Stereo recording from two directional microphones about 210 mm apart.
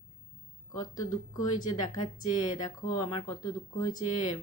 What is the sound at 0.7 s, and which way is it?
Speech, 15° left (ahead or behind).